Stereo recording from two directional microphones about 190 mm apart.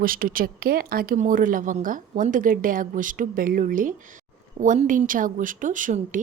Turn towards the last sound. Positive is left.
turn(degrees=-45)  # may be behind; listen again after turning